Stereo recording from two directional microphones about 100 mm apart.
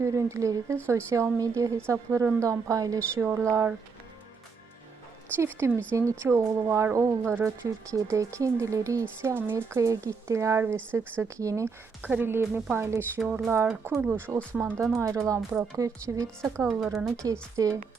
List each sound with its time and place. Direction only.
0.0 s speech: 30° right (ahead or behind)
5.4 s speech: 30° right (ahead or behind)
12.0 s speech: 20° right (ahead or behind)
14.6 s speech: 30° right (ahead or behind)
15.4 s speech: centre (ahead or behind)
15.8 s speech: 30° right (ahead or behind)